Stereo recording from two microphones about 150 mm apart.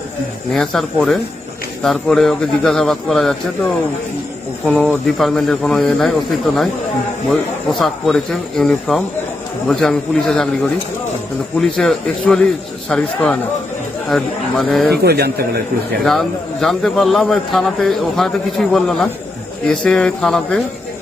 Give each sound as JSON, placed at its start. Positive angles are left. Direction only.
{"t": 0.5, "sound": "a man's voice", "side_deg": 0}
{"t": 15.0, "sound": "speech", "side_deg": -90}
{"t": 16.0, "sound": "a man's voice", "side_deg": 0}